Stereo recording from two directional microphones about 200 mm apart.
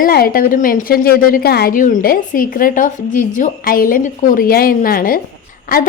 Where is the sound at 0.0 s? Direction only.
50° left (ahead or behind).